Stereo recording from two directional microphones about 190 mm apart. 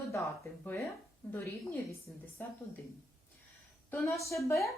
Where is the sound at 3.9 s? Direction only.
10° left (ahead or behind).